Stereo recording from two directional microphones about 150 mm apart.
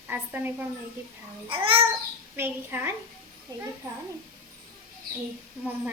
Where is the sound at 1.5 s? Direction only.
35° right (ahead or behind).